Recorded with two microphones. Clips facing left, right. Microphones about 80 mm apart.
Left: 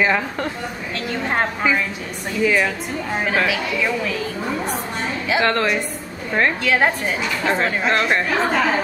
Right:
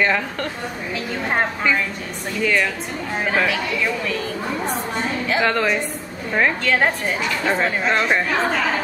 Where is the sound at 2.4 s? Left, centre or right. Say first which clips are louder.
Left 2 dB; centre.